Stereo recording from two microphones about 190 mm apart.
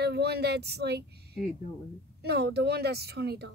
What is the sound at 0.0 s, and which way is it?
Speech, 60° right (ahead or behind).